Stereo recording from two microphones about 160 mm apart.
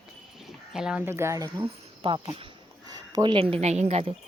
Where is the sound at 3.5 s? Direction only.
45° right (ahead or behind).